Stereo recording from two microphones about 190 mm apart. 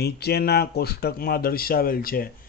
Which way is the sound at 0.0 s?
60° left (ahead or behind).